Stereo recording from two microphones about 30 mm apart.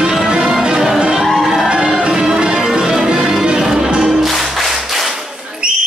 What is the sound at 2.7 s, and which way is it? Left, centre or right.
Music, right.